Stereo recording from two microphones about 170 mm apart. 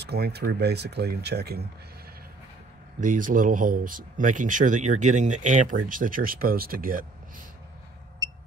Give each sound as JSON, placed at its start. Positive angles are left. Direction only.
{"t": 0.0, "sound": "speech", "side_deg": -70}
{"t": 3.0, "sound": "speech", "side_deg": -50}